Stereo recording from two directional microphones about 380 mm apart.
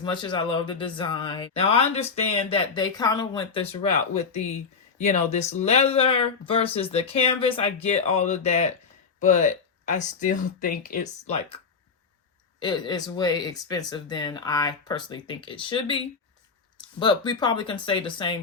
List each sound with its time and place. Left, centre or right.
0.0 s speech: centre
17.0 s speech: centre